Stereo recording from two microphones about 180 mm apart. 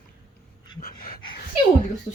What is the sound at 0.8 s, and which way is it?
Dog, 55° left (ahead or behind).